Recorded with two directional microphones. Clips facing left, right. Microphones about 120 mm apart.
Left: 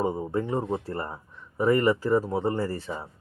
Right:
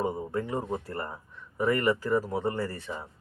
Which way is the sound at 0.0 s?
25° left (ahead or behind).